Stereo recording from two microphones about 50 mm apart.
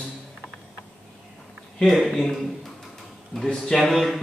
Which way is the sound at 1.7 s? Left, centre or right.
Centre.